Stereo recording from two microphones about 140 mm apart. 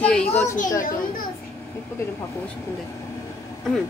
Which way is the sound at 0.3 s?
15° left (ahead or behind).